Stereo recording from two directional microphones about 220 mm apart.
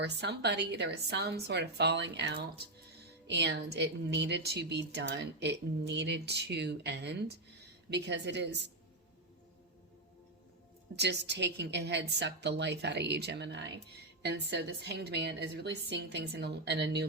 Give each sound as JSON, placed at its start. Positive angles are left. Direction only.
{"t": 0.0, "sound": "speech", "side_deg": -50}
{"t": 10.9, "sound": "speech", "side_deg": -50}